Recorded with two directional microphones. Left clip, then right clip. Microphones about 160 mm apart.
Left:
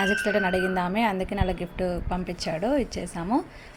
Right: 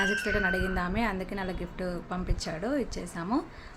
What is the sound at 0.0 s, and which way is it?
A woman's voice, 20° left (ahead or behind).